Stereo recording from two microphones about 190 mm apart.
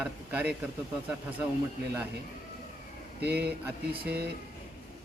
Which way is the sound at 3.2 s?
60° right (ahead or behind).